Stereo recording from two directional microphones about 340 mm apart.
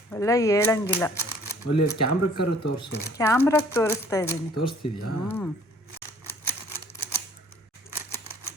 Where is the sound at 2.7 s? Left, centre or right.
Centre.